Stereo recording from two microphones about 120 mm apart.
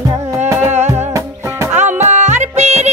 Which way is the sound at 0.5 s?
15° right (ahead or behind).